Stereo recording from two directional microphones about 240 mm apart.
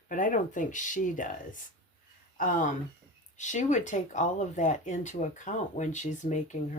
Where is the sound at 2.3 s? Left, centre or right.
Left.